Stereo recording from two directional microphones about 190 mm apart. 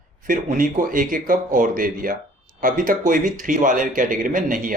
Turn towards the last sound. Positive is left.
turn(degrees=-45)  # may be behind; listen again after turning